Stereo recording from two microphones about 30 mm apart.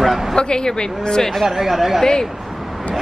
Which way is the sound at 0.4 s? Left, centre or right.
Left.